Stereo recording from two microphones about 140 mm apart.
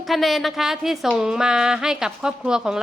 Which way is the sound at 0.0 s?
Centre (ahead or behind).